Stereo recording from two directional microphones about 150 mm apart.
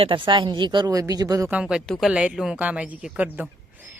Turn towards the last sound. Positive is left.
turn(degrees=-10)  # may be behind; listen again after turning